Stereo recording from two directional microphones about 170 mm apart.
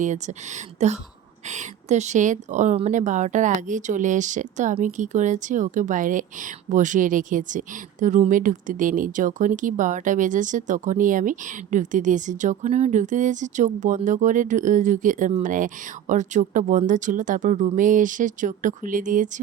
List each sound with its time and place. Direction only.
0.0 s speech: 45° right (ahead or behind)